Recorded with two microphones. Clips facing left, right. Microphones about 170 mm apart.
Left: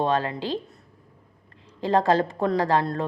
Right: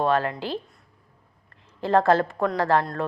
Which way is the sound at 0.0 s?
20° left (ahead or behind).